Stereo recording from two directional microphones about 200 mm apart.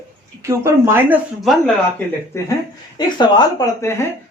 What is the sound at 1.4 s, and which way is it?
Speech, centre (ahead or behind).